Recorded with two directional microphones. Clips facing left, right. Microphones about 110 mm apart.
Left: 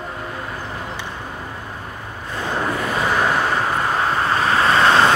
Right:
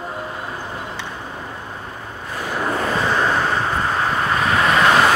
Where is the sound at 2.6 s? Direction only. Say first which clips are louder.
Right 3 dB; 35° right (ahead or behind).